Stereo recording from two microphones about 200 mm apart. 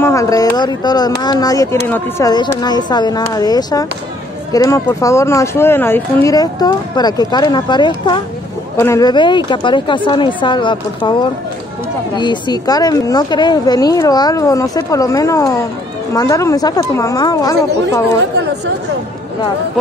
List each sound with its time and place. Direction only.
0.0 s a woman's voice: 15° left (ahead or behind)